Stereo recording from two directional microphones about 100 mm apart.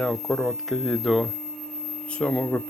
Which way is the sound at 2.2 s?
15° left (ahead or behind).